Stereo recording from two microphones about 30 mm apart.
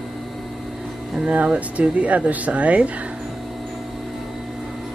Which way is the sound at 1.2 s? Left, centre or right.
Right.